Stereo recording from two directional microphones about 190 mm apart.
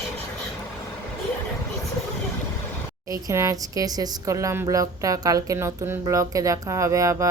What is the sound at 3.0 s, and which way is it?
Speech, 20° right (ahead or behind).